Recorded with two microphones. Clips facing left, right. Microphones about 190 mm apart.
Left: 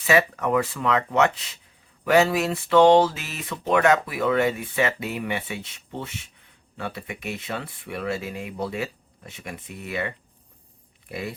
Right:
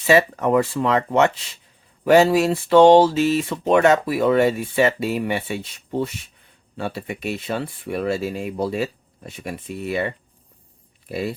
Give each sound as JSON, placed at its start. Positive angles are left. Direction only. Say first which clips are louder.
{"t": 0.1, "sound": "speech", "louder": "right 4 dB", "side_deg": -30}